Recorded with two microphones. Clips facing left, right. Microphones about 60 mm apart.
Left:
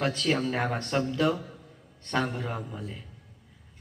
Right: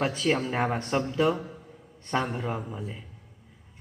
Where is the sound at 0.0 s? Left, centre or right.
Centre.